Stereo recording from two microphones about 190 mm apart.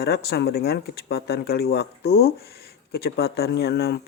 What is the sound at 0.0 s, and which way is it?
Speech, 60° left (ahead or behind).